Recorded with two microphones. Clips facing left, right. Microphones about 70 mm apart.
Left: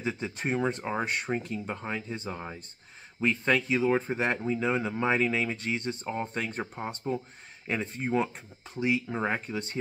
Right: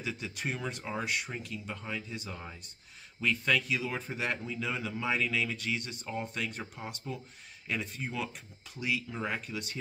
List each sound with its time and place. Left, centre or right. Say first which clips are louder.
0.0 s speech: left 5 dB; left